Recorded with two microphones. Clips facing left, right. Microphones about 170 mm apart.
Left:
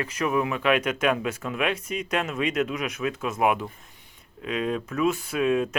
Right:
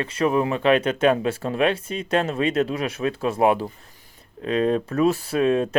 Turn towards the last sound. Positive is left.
turn(degrees=-35)  # may be behind; listen again after turning